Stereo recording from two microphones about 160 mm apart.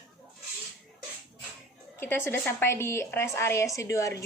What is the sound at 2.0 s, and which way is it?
A woman's voice, 15° left (ahead or behind).